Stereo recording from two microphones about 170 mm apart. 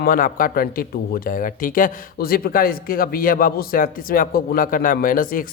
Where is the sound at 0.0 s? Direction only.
55° left (ahead or behind).